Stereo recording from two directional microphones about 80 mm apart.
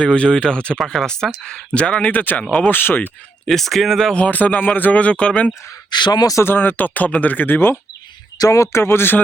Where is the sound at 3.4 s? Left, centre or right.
Centre.